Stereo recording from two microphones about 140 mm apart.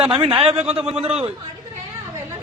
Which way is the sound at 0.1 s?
35° right (ahead or behind).